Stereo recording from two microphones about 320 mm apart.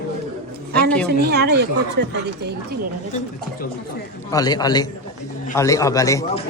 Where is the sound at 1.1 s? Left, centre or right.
Right.